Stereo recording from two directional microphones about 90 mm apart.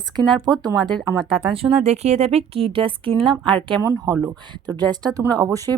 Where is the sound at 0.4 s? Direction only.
50° right (ahead or behind).